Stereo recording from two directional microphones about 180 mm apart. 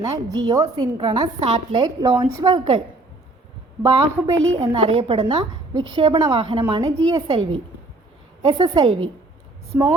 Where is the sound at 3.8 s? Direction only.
20° right (ahead or behind).